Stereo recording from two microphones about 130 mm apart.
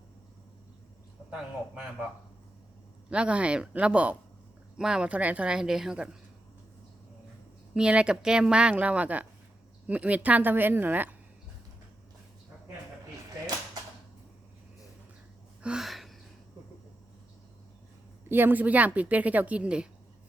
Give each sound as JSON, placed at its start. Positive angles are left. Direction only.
{"t": 1.3, "sound": "a woman's voice", "side_deg": -5}
{"t": 3.1, "sound": "a woman's voice", "side_deg": -10}
{"t": 7.7, "sound": "a woman's voice", "side_deg": -5}
{"t": 15.6, "sound": "a sound", "side_deg": -5}
{"t": 18.3, "sound": "a woman's voice", "side_deg": -15}